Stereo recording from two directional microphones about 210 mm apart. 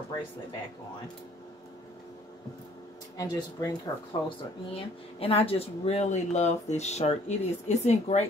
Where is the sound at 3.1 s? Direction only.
15° left (ahead or behind).